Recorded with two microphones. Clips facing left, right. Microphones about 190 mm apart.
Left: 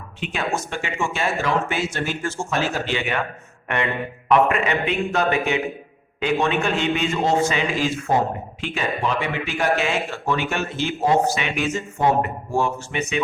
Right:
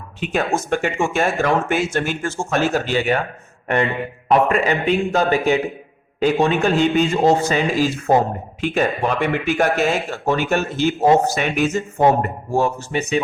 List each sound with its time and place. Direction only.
0.2 s a man's voice: 45° right (ahead or behind)